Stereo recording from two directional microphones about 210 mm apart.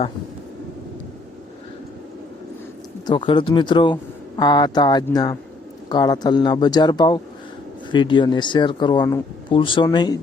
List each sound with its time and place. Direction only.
3.1 s speech: 25° left (ahead or behind)